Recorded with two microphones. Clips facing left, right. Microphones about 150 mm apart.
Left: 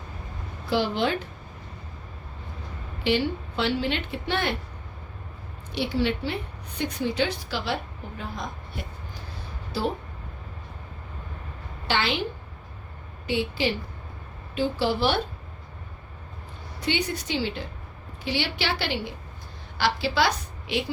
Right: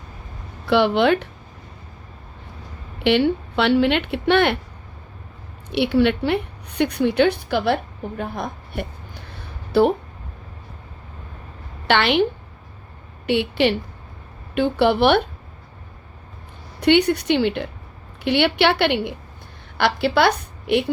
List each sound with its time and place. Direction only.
0.6 s speech: 70° right (ahead or behind)
3.0 s speech: 65° right (ahead or behind)
5.7 s a woman's voice: 65° right (ahead or behind)
11.9 s speech: 65° right (ahead or behind)
13.2 s a woman's voice: 65° right (ahead or behind)
16.8 s a woman's voice: 65° right (ahead or behind)